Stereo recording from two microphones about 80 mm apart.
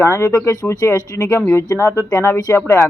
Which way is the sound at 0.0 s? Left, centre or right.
Left.